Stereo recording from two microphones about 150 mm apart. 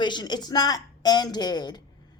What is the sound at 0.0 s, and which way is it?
Speech, 30° left (ahead or behind).